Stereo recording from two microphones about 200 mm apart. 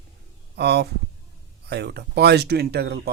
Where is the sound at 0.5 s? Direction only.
55° right (ahead or behind).